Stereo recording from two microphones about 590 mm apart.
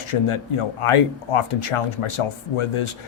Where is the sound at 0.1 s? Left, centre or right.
Left.